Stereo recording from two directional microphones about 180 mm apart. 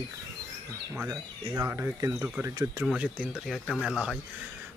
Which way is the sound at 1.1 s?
20° right (ahead or behind).